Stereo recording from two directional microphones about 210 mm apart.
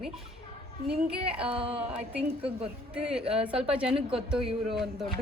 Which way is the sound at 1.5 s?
25° right (ahead or behind).